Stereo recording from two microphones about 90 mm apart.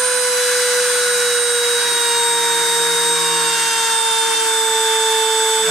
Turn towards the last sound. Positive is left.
turn(degrees=0)  # may be behind; listen again after turning